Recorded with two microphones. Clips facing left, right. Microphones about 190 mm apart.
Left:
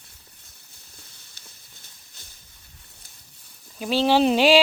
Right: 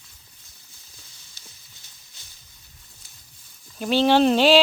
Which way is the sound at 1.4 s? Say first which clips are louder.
Right 1 dB; 55° left (ahead or behind).